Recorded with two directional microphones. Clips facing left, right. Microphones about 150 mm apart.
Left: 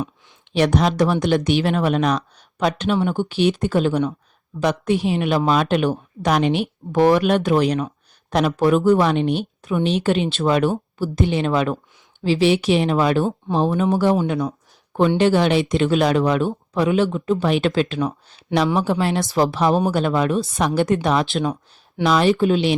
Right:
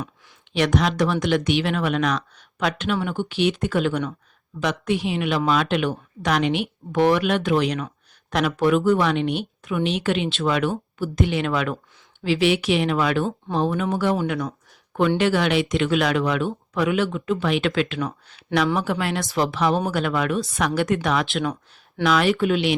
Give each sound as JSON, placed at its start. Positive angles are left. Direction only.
{"t": 0.5, "sound": "speech", "side_deg": 35}
{"t": 13.2, "sound": "speech", "side_deg": 5}
{"t": 13.9, "sound": "speech", "side_deg": 35}
{"t": 15.2, "sound": "speech", "side_deg": 35}